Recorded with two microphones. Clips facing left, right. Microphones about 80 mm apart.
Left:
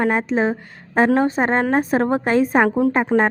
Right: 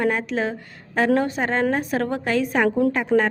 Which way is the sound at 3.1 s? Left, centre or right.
Centre.